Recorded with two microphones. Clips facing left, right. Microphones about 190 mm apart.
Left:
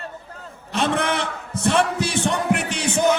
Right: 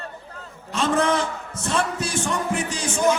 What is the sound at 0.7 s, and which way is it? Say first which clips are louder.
A man's voice: right 1 dB; 65° left (ahead or behind).